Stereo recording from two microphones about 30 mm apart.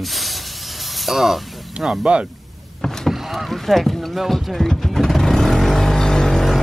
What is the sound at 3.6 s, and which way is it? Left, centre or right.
Speech, centre.